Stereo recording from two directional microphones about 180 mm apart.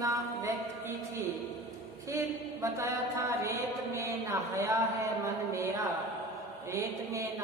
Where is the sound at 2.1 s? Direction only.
15° right (ahead or behind).